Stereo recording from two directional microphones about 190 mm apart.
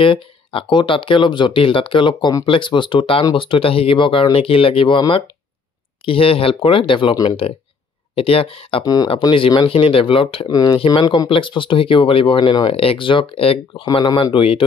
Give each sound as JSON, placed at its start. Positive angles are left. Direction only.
{"t": 0.0, "sound": "speech", "side_deg": 30}